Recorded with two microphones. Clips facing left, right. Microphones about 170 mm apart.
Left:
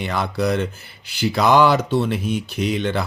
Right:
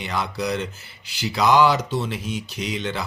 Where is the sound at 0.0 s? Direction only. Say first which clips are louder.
Left 4 dB; 55° left (ahead or behind).